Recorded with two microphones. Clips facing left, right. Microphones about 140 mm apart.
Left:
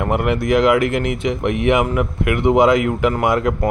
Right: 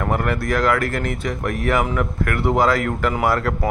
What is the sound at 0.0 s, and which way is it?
Speech, 15° left (ahead or behind).